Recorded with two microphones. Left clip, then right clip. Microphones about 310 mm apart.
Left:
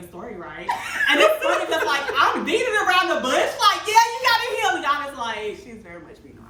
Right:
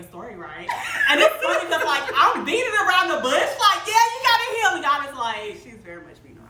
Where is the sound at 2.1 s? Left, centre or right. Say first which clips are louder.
Right 2 dB; centre.